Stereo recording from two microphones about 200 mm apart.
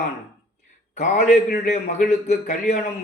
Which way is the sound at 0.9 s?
35° left (ahead or behind).